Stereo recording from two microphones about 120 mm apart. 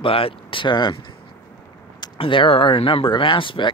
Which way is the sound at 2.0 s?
45° left (ahead or behind).